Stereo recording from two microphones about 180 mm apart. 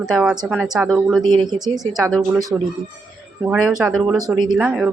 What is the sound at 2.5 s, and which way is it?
Speech, 15° right (ahead or behind).